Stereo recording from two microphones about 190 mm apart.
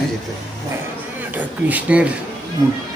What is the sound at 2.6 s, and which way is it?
Speech, 20° right (ahead or behind).